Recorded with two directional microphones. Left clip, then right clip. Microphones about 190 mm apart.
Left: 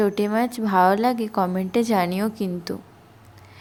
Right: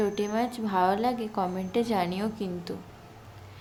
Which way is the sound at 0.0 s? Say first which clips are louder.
Left 6 dB; 40° left (ahead or behind).